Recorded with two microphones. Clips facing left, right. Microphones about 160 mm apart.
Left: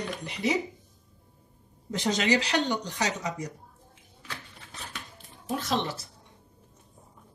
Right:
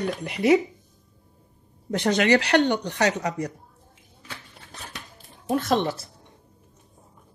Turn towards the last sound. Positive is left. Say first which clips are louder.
# right 8 dB
turn(degrees=-55)  # may be behind; listen again after turning